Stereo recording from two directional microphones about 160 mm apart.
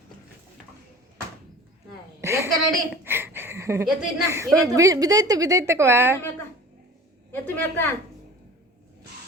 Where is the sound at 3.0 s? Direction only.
15° right (ahead or behind).